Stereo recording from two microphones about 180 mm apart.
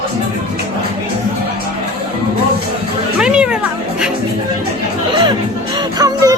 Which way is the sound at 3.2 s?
5° right (ahead or behind).